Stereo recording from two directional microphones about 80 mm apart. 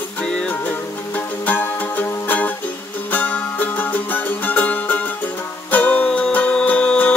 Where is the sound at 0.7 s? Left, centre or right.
Left.